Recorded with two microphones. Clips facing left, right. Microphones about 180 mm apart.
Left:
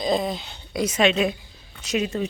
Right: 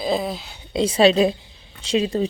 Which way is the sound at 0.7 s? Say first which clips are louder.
Right 5 dB; 30° right (ahead or behind).